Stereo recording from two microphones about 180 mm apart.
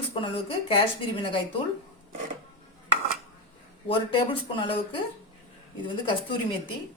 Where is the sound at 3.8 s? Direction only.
30° left (ahead or behind).